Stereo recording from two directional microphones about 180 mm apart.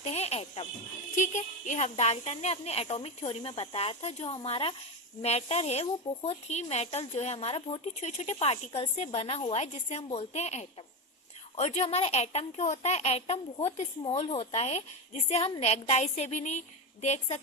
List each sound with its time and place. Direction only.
0.0 s a woman's voice: 35° left (ahead or behind)